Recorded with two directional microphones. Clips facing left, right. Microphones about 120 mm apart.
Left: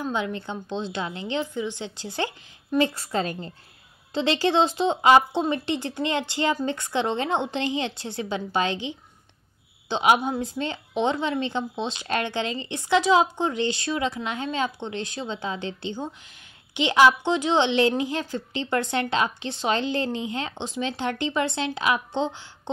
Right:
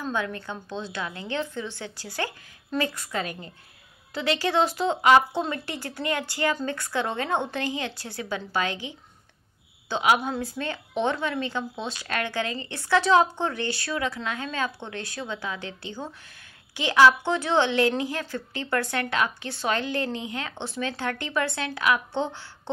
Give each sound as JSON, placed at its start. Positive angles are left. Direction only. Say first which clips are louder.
{"t": 0.0, "sound": "a woman's voice", "louder": "left 2 dB", "side_deg": 20}